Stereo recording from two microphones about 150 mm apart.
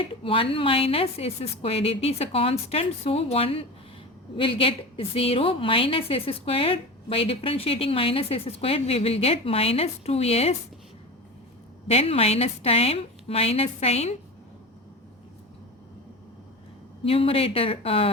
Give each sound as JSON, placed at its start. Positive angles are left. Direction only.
{"t": 0.2, "sound": "a woman's voice", "side_deg": 35}
{"t": 11.9, "sound": "a woman's voice", "side_deg": 40}
{"t": 17.0, "sound": "a woman's voice", "side_deg": 40}